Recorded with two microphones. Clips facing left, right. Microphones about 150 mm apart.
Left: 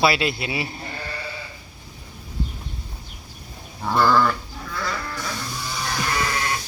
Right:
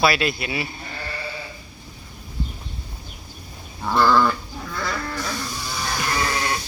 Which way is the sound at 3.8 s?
5° left (ahead or behind).